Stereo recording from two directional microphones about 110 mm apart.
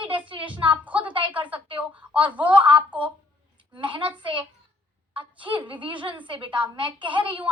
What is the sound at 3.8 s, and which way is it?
A woman's voice, 50° right (ahead or behind).